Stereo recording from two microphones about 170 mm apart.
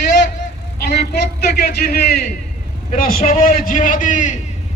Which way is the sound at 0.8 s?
65° left (ahead or behind).